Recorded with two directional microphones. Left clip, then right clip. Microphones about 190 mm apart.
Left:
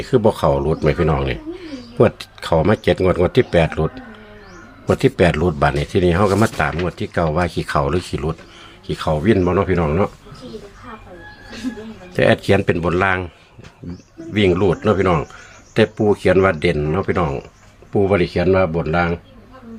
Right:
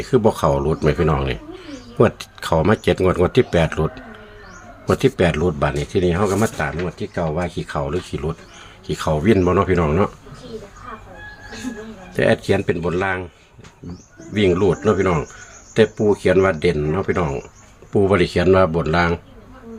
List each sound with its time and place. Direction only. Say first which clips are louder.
0.0 s speech: left 1 dB; 5° left (ahead or behind); by 8.4 s 25° left (ahead or behind)
8.9 s speech: even; centre (ahead or behind)
12.1 s speech: left 2 dB; 20° left (ahead or behind)
14.3 s speech: left 1 dB; 15° left (ahead or behind)
17.9 s speech: even; 5° right (ahead or behind)